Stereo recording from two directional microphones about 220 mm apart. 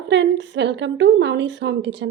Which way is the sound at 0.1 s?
55° right (ahead or behind).